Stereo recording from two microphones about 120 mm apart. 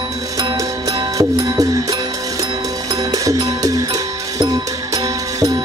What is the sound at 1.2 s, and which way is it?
Music, 30° right (ahead or behind).